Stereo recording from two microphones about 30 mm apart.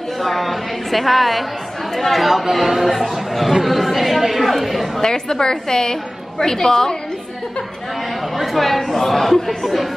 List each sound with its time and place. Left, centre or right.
0.2 s a woman's voice: centre
5.0 s a woman's voice: left
8.4 s speech: centre